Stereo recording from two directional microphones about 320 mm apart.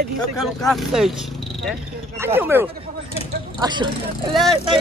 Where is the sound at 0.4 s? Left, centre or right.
Centre.